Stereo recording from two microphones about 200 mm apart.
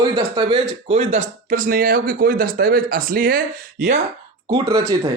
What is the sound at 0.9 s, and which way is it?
Speech, 40° right (ahead or behind).